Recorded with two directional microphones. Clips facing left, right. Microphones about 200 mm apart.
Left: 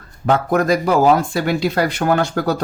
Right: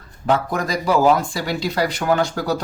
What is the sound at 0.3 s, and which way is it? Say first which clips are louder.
Speech: left 5 dB; 55° left (ahead or behind).